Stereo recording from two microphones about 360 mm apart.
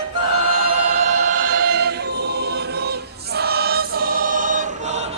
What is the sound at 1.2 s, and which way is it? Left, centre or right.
Choir, right.